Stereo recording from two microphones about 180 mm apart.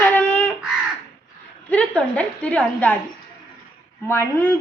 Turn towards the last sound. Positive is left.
turn(degrees=15)  # may be behind; listen again after turning